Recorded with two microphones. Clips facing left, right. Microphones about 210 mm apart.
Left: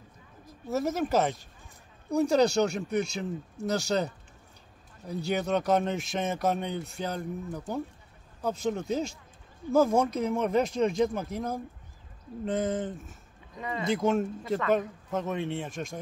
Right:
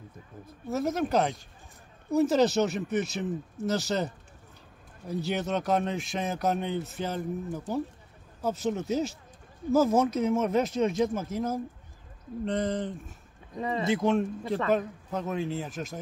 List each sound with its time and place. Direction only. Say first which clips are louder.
0.7 s a man's voice: even; centre (ahead or behind)
13.6 s speech: right 4 dB; 35° right (ahead or behind)
13.8 s a man's voice: even; centre (ahead or behind)